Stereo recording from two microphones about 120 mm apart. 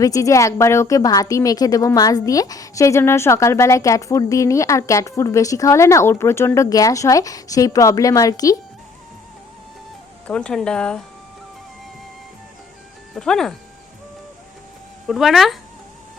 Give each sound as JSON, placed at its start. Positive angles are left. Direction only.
{"t": 0.0, "sound": "speech", "side_deg": 30}
{"t": 10.2, "sound": "speech", "side_deg": 10}
{"t": 13.1, "sound": "speech", "side_deg": 5}
{"t": 15.0, "sound": "speech", "side_deg": 0}